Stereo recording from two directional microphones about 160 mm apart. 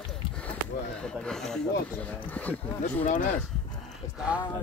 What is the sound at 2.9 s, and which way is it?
Speech, 50° left (ahead or behind).